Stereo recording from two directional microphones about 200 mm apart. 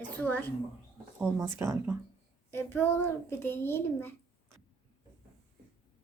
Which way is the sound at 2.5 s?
10° left (ahead or behind).